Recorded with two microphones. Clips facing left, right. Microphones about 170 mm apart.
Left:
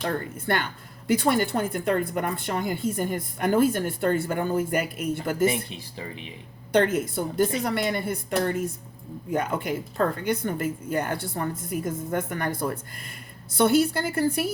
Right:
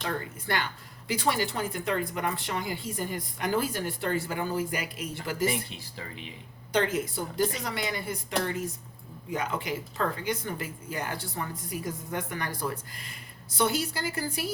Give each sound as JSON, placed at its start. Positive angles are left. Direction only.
{"t": 0.0, "sound": "a woman's voice", "side_deg": 50}
{"t": 5.5, "sound": "speech", "side_deg": 20}
{"t": 6.7, "sound": "a woman's voice", "side_deg": 55}